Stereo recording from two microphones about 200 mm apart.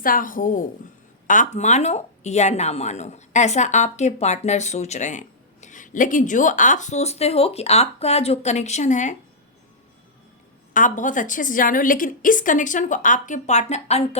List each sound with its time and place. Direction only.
0.0 s a woman's voice: 45° left (ahead or behind)
10.8 s speech: 40° left (ahead or behind)